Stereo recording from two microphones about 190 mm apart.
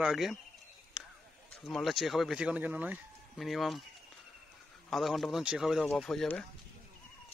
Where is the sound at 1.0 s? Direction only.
5° right (ahead or behind).